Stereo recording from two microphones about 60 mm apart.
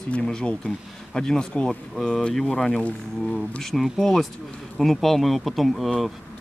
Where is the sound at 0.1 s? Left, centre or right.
Centre.